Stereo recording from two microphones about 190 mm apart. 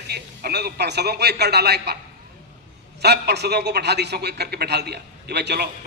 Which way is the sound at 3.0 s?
60° right (ahead or behind).